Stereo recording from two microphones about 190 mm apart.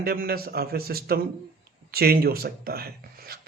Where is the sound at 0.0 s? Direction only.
55° right (ahead or behind).